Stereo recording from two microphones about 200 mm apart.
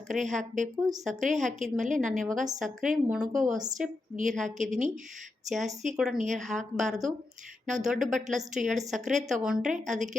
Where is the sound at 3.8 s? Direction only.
40° right (ahead or behind).